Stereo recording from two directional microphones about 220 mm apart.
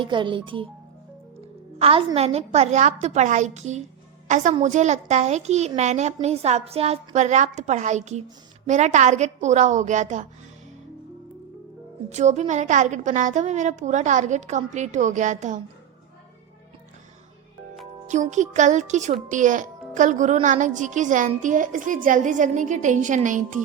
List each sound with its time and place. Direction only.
0.0 s speech: 20° right (ahead or behind)
1.8 s a woman's voice: 25° right (ahead or behind)
12.0 s speech: 30° right (ahead or behind)
18.1 s speech: 35° right (ahead or behind)